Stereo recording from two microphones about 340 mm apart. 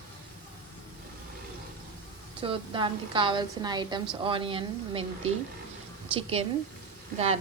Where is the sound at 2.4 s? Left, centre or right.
Centre.